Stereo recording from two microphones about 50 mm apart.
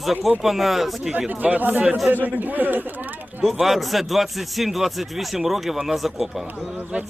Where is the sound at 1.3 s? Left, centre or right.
Right.